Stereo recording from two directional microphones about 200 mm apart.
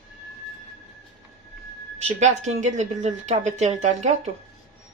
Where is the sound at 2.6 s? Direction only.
35° right (ahead or behind).